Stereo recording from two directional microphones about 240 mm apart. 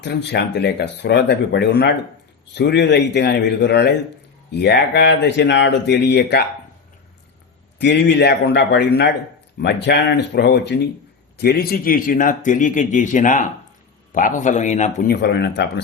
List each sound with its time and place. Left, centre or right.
0.0 s speech: left
7.8 s a man's voice: left